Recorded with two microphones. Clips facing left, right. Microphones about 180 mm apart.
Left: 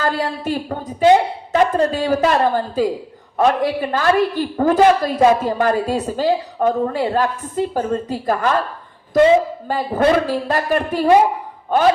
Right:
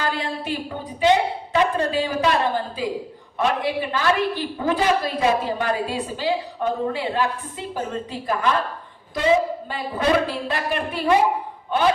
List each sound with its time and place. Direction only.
0.0 s a woman's voice: 45° left (ahead or behind)
9.6 s a woman's voice: 45° left (ahead or behind)